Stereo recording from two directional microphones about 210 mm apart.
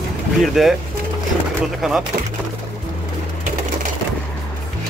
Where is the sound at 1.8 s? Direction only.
Centre (ahead or behind).